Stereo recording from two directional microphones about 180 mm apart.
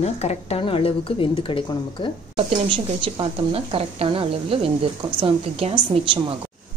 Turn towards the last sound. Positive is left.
turn(degrees=-30)  # may be behind; listen again after turning